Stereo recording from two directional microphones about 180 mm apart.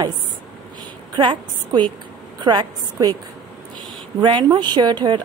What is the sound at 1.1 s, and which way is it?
A woman's voice, 25° right (ahead or behind).